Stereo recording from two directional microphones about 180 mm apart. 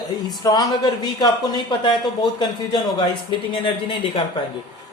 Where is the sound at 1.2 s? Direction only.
25° left (ahead or behind).